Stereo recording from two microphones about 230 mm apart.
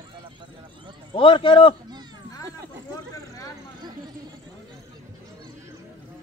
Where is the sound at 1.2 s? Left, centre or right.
Left.